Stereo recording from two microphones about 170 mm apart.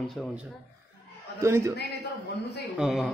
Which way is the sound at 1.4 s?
15° right (ahead or behind).